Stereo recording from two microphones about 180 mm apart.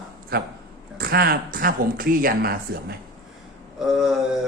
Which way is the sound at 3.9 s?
Centre (ahead or behind).